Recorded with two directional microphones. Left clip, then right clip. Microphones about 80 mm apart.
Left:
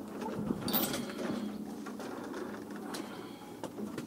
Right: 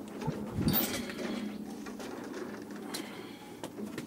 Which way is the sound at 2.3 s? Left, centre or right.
Centre.